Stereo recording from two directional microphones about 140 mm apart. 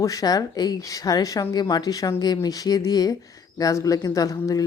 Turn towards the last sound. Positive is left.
turn(degrees=25)  # may be behind; listen again after turning